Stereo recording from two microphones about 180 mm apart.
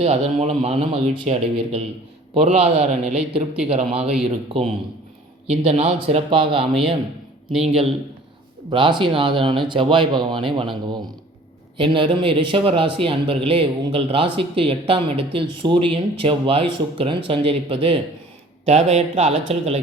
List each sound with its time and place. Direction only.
0.0 s a man's voice: 35° right (ahead or behind)
3.0 s speech: 5° right (ahead or behind)
3.7 s a man's voice: 35° right (ahead or behind)